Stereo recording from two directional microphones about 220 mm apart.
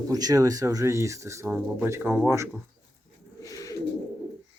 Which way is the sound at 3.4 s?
15° left (ahead or behind).